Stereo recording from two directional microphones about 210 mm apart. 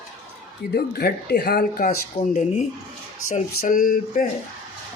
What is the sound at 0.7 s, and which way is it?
Speech, 50° left (ahead or behind).